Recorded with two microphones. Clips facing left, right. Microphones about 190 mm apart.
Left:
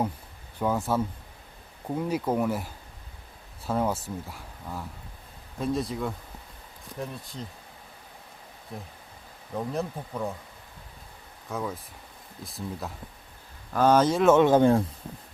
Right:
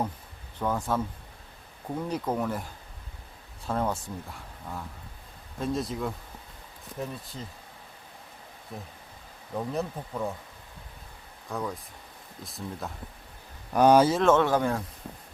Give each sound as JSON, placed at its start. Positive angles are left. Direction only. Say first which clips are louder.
{"t": 0.6, "sound": "speech", "louder": "left 2 dB", "side_deg": 10}
{"t": 3.7, "sound": "speech", "louder": "left 2 dB", "side_deg": 5}
{"t": 9.6, "sound": "speech", "louder": "even", "side_deg": 0}
{"t": 11.4, "sound": "speech", "louder": "left 1 dB", "side_deg": 0}
{"t": 13.7, "sound": "speech", "louder": "right 2 dB", "side_deg": -15}
{"t": 14.1, "sound": "speech", "louder": "left 2 dB", "side_deg": 5}
{"t": 14.4, "sound": "speech", "louder": "left 7 dB", "side_deg": 25}